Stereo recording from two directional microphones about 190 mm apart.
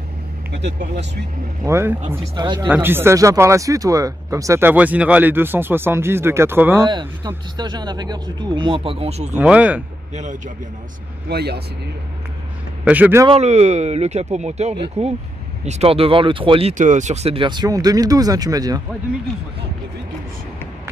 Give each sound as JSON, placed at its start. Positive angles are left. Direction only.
{"t": 0.7, "sound": "speech", "side_deg": -40}
{"t": 1.6, "sound": "speech", "side_deg": -15}
{"t": 2.3, "sound": "speech", "side_deg": -25}
{"t": 2.7, "sound": "speech", "side_deg": -10}
{"t": 6.9, "sound": "speech", "side_deg": -25}
{"t": 9.3, "sound": "speech", "side_deg": -5}
{"t": 11.2, "sound": "speech", "side_deg": -55}
{"t": 12.8, "sound": "speech", "side_deg": -10}
{"t": 13.3, "sound": "speech", "side_deg": -35}